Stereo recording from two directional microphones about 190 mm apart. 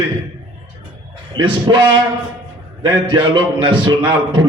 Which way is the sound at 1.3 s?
25° right (ahead or behind).